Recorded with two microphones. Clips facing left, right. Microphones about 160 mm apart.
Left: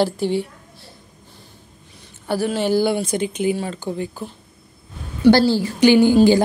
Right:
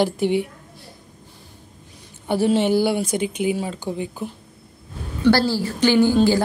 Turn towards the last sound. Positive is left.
turn(degrees=15)  # may be behind; listen again after turning